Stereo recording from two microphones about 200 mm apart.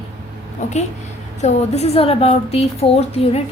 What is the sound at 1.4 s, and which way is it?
A woman's voice, 35° left (ahead or behind).